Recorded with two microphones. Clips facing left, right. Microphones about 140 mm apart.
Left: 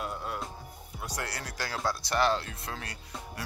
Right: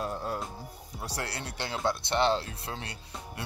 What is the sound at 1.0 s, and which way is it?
Speech, 30° right (ahead or behind).